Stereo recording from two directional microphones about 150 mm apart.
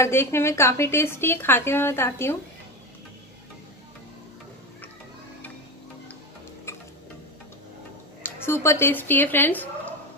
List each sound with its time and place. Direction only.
0.0 s a woman's voice: 15° left (ahead or behind)
8.2 s speech: 15° left (ahead or behind)